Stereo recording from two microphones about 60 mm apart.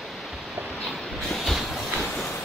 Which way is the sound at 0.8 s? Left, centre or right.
Centre.